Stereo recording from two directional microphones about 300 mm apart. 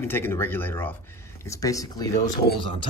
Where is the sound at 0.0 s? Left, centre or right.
Centre.